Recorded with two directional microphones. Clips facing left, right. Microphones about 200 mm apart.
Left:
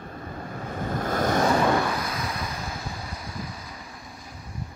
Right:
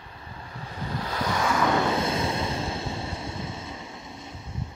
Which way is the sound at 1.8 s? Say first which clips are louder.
Right 3 dB; 25° right (ahead or behind).